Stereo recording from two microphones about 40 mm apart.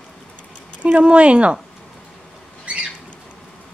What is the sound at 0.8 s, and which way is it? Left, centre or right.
Speech, right.